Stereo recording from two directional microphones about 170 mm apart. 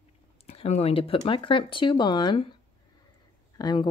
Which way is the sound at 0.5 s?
35° left (ahead or behind).